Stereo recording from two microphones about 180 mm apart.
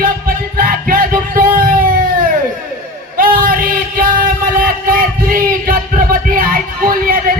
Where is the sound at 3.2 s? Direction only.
50° right (ahead or behind).